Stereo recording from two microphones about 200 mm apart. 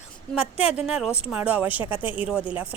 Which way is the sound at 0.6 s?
30° left (ahead or behind).